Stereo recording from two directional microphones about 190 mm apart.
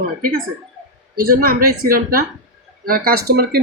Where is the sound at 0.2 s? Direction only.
50° right (ahead or behind).